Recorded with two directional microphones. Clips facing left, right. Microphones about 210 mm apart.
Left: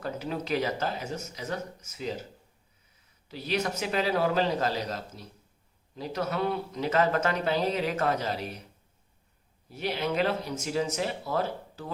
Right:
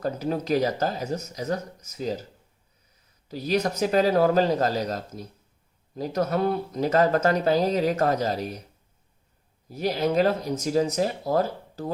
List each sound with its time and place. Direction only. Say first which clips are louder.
0.0 s speech: right 6 dB; 40° right (ahead or behind)
3.2 s speech: right 5 dB; 40° right (ahead or behind)
9.6 s speech: right 6 dB; 40° right (ahead or behind)